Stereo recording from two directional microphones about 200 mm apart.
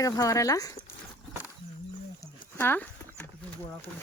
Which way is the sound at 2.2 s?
10° left (ahead or behind).